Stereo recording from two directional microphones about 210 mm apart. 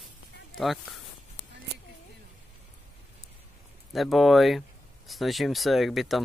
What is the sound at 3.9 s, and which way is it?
Speech, centre (ahead or behind).